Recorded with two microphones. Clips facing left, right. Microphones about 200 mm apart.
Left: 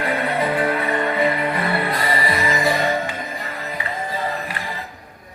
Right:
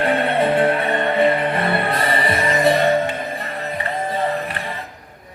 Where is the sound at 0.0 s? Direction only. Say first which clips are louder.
Right 4 dB; 60° right (ahead or behind).